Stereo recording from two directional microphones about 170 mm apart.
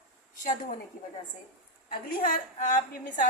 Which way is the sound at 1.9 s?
60° left (ahead or behind).